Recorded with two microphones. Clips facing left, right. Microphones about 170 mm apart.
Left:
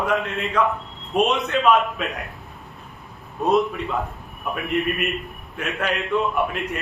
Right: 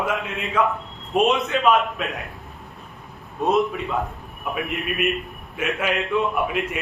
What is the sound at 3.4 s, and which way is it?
Speech, centre (ahead or behind).